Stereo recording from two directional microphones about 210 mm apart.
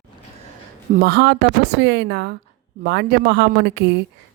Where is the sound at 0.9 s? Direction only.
50° right (ahead or behind).